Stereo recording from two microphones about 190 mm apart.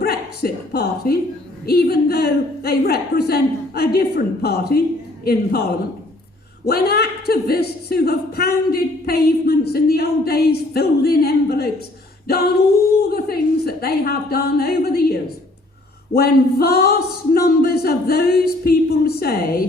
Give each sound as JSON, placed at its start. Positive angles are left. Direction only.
{"t": 0.0, "sound": "a sound", "side_deg": 55}
{"t": 1.6, "sound": "speech", "side_deg": 55}
{"t": 13.0, "sound": "speech", "side_deg": 55}